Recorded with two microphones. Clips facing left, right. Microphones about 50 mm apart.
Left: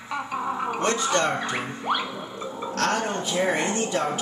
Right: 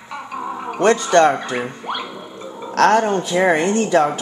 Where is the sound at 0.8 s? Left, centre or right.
Right.